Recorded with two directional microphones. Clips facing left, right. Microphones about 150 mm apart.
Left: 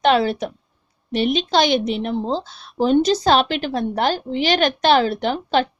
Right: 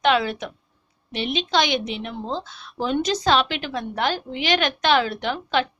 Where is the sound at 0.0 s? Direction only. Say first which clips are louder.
Left 4 dB; 35° left (ahead or behind).